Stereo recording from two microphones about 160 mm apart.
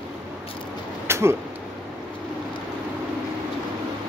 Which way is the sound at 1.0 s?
15° right (ahead or behind).